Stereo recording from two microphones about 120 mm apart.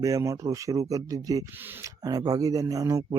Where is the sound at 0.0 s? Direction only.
25° right (ahead or behind).